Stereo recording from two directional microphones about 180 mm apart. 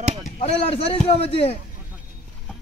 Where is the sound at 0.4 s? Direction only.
35° left (ahead or behind).